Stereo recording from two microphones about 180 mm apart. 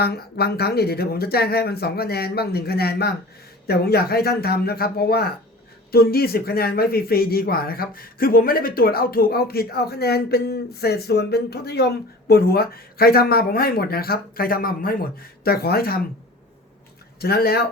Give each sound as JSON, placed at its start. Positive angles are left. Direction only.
{"t": 0.0, "sound": "a man's voice", "side_deg": 60}
{"t": 17.2, "sound": "a man's voice", "side_deg": 60}